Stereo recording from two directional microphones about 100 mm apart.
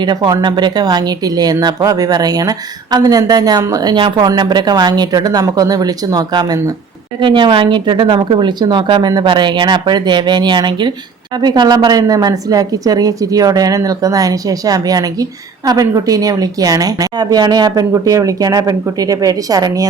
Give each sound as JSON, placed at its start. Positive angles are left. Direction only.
{"t": 0.0, "sound": "a woman's voice", "side_deg": -45}
{"t": 7.2, "sound": "a woman's voice", "side_deg": -55}